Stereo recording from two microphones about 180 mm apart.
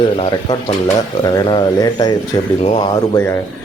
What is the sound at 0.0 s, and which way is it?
Speech, 30° left (ahead or behind).